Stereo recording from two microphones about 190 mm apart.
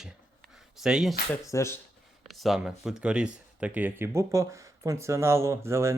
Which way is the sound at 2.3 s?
Centre (ahead or behind).